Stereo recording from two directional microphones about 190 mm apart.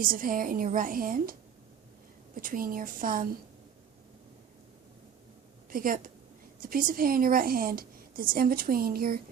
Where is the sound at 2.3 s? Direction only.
45° right (ahead or behind).